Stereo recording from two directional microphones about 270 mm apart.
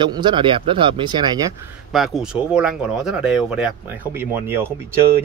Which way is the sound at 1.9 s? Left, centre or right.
Centre.